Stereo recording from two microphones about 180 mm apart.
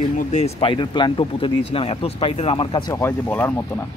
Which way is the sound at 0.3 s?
35° left (ahead or behind).